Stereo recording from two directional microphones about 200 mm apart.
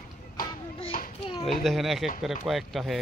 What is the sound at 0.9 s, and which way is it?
Children playing, 45° left (ahead or behind).